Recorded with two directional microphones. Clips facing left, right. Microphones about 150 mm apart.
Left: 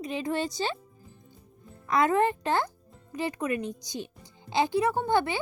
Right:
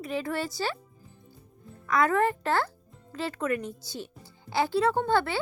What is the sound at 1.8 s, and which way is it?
Speech, 20° left (ahead or behind).